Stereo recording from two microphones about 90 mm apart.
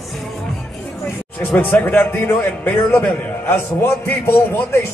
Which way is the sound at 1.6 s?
20° left (ahead or behind).